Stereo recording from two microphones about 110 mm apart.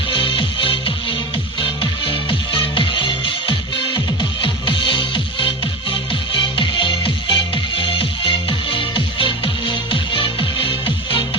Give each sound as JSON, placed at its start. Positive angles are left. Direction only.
{"t": 0.1, "sound": "music", "side_deg": 50}